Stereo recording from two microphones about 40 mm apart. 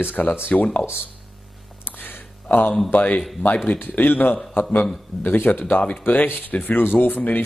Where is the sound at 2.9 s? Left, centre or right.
Left.